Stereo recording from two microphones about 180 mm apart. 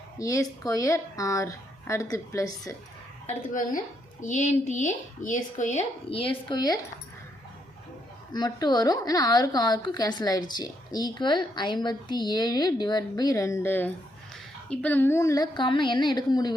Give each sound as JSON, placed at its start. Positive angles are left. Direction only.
{"t": 0.2, "sound": "a woman's voice", "side_deg": 15}
{"t": 3.2, "sound": "a woman's voice", "side_deg": 45}
{"t": 8.3, "sound": "a woman's voice", "side_deg": 20}